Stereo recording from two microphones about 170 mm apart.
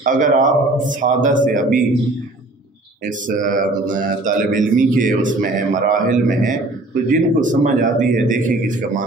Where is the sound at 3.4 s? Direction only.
50° right (ahead or behind).